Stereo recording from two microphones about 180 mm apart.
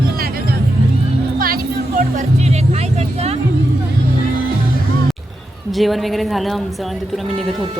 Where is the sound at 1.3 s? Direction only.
55° right (ahead or behind).